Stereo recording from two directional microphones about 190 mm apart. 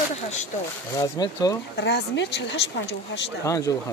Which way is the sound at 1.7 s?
65° left (ahead or behind).